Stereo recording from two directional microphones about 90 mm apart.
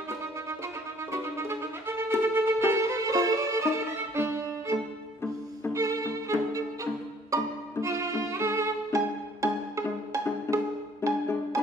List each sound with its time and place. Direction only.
1.1 s music: 30° right (ahead or behind)
11.0 s music: 30° left (ahead or behind)